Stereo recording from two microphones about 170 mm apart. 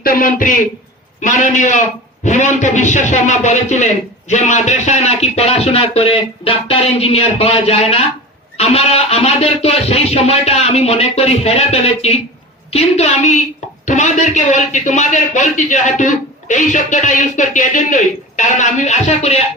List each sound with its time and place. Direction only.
0.0 s a man's voice: 60° left (ahead or behind); by 19.4 s 40° left (ahead or behind)